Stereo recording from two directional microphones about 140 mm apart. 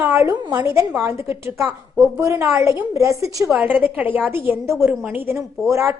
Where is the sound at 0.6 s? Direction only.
20° right (ahead or behind).